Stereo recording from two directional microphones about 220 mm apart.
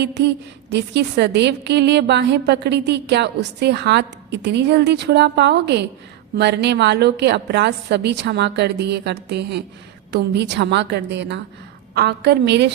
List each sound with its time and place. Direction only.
0.0 s a woman's voice: 50° right (ahead or behind)